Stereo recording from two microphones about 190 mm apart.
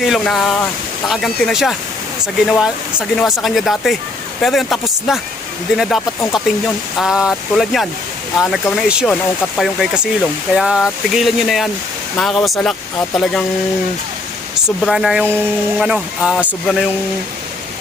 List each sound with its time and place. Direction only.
0.0 s speech: centre (ahead or behind)
14.8 s speech: centre (ahead or behind)